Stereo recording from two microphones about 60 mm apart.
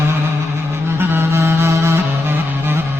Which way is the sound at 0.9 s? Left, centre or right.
Right.